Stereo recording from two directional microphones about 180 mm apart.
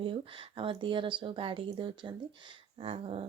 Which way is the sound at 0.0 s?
30° right (ahead or behind).